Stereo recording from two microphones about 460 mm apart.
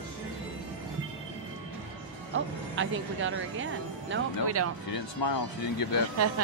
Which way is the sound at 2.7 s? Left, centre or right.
Right.